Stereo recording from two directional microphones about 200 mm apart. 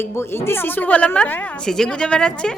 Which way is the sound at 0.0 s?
10° left (ahead or behind).